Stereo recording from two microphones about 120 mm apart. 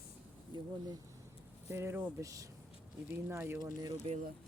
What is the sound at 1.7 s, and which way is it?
Speech, 20° right (ahead or behind).